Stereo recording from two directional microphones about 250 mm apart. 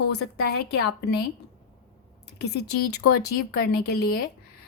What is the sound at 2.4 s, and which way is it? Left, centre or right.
Speech, left.